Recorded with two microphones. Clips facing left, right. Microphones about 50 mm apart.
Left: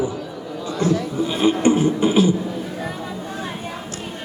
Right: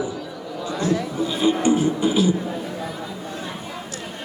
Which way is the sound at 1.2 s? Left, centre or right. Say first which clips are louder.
Left 2 dB; left.